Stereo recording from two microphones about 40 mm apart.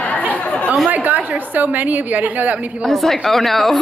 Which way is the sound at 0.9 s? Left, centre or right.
Right.